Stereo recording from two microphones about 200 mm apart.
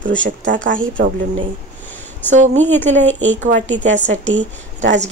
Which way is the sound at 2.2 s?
35° right (ahead or behind).